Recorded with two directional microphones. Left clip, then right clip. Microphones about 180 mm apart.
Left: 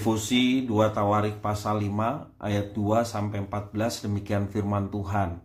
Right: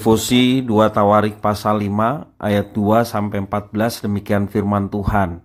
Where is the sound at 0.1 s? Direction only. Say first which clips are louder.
Right 10 dB; 60° right (ahead or behind); by 5.3 s 45° right (ahead or behind).